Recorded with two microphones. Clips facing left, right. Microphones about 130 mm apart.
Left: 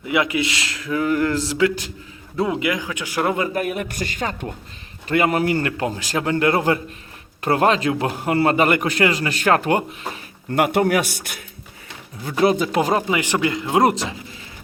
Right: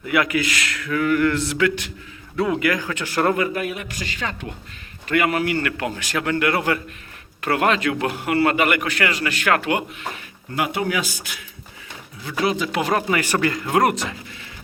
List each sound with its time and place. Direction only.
0.0 s speech: 20° left (ahead or behind)
3.5 s speech: 45° left (ahead or behind)
5.0 s a man's voice: 35° left (ahead or behind)
10.5 s a man's voice: 55° left (ahead or behind)
12.3 s a man's voice: 40° left (ahead or behind)
13.0 s speech: 15° left (ahead or behind)